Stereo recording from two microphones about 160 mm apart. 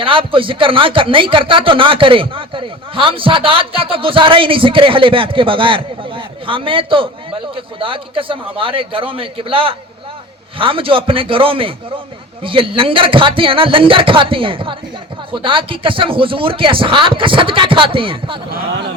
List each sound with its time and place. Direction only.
0.0 s a man's voice: 35° right (ahead or behind)